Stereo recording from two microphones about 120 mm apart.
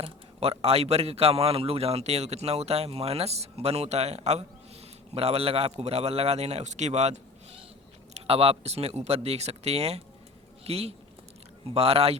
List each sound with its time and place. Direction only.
0.0 s a man's voice: 55° right (ahead or behind)
8.1 s a man's voice: 55° right (ahead or behind)